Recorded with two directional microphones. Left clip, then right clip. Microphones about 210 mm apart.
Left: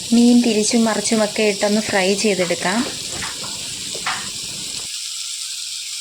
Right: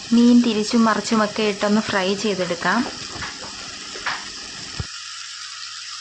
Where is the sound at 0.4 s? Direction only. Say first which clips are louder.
Left 2 dB; 20° left (ahead or behind).